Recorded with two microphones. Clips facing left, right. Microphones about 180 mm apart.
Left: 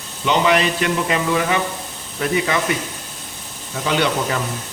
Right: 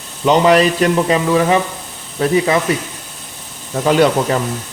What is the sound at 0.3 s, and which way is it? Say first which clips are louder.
Speech: right 6 dB; 40° right (ahead or behind).